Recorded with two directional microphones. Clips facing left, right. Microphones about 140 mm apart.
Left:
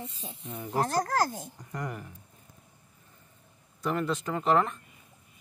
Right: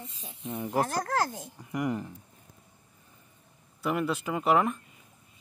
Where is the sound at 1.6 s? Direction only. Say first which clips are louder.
Right 9 dB; 15° right (ahead or behind).